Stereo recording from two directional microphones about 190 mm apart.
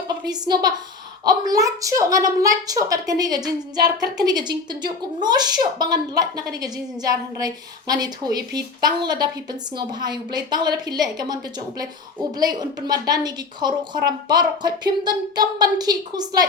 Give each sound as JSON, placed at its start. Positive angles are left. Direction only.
{"t": 0.3, "sound": "a woman's voice", "side_deg": -20}